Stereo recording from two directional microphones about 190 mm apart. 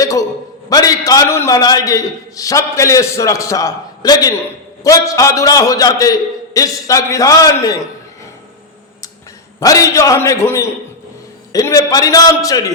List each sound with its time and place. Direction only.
0.0 s a man's voice: 15° left (ahead or behind)
9.6 s a man's voice: 15° left (ahead or behind)